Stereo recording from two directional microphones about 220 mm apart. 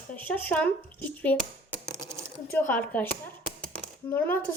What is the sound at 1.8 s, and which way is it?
Typing, 10° right (ahead or behind).